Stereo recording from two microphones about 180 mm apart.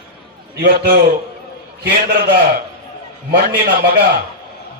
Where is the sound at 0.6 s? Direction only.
55° right (ahead or behind).